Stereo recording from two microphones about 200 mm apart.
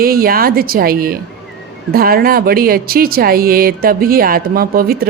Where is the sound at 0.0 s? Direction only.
45° right (ahead or behind).